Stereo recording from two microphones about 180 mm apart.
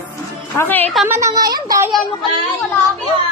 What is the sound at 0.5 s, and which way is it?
Speech, 10° left (ahead or behind).